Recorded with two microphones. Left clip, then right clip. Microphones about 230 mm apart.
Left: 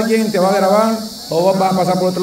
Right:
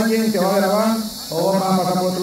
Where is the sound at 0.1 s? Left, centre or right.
Left.